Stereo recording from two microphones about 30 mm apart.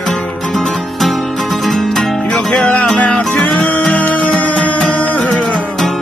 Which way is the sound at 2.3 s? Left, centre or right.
Left.